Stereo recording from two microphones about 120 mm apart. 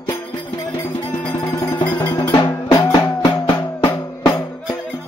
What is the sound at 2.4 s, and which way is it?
Music, 40° left (ahead or behind).